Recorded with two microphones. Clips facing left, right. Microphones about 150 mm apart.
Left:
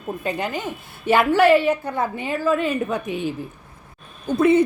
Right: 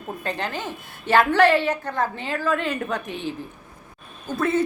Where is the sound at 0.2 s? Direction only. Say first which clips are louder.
Left 2 dB; 10° left (ahead or behind).